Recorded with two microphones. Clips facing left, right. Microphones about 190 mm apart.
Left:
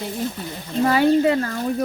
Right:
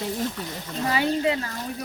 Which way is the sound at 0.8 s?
50° left (ahead or behind).